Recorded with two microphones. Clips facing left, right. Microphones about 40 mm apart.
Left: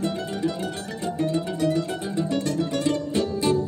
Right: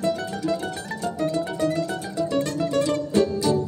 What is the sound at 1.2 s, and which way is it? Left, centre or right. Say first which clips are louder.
Music: even; left.